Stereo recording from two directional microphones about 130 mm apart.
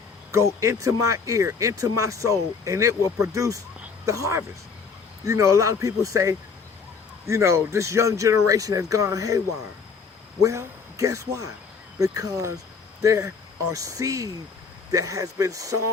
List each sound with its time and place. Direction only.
0.3 s speech: 20° right (ahead or behind)
10.4 s speech: 25° right (ahead or behind)